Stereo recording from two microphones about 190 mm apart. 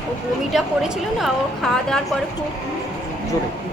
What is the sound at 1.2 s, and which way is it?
Speech, centre (ahead or behind).